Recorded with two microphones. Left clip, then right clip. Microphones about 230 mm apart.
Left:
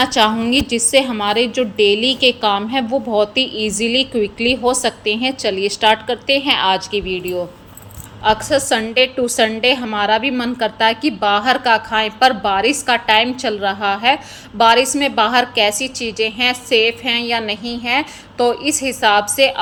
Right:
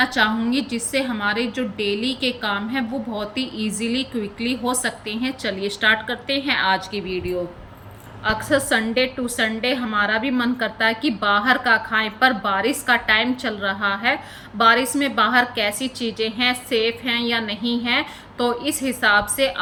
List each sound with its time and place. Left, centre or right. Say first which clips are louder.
0.0 s a woman's voice: left 5 dB; centre